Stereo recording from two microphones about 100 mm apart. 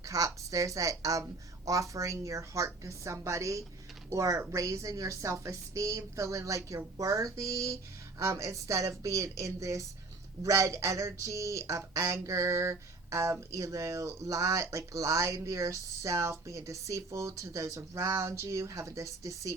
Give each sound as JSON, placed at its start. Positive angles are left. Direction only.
{"t": 0.0, "sound": "speech", "side_deg": -35}